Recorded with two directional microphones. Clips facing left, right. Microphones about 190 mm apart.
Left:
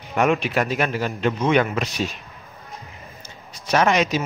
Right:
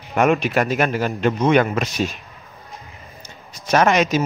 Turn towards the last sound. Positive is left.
turn(degrees=-50)  # may be behind; listen again after turning